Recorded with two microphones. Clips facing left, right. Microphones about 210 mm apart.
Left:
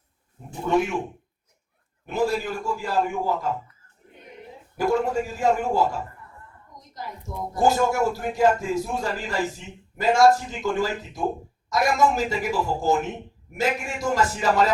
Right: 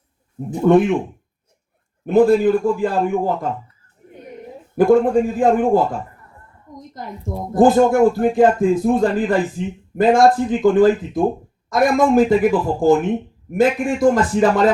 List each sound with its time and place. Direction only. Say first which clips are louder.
0.6 s speech: right 10 dB; 55° right (ahead or behind)
2.0 s speech: right 12 dB; 55° right (ahead or behind)
4.1 s a sound: right 9 dB; 45° right (ahead or behind)
4.8 s speech: right 10 dB; 55° right (ahead or behind)
7.5 s speech: right 9 dB; 55° right (ahead or behind)